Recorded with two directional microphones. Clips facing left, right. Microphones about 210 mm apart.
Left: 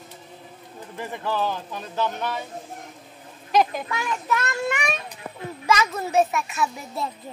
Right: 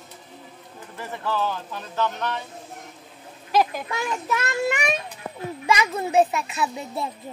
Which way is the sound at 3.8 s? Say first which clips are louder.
Right 1 dB; 20° right (ahead or behind).